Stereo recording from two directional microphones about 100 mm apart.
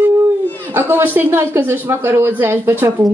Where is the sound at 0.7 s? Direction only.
20° right (ahead or behind).